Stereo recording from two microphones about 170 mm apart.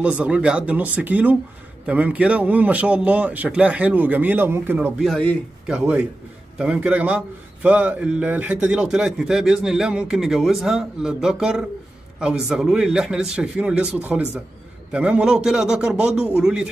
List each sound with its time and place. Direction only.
0.2 s a man's voice: 5° right (ahead or behind)
5.7 s a man's voice: 10° right (ahead or behind)